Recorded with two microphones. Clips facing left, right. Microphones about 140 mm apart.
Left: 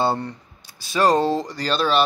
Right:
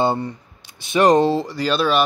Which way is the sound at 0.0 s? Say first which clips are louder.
Right 2 dB; 10° right (ahead or behind).